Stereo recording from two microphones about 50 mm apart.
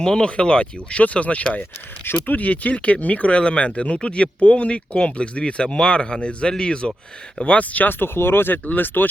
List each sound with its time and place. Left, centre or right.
0.0 s speech: centre; by 9.0 s left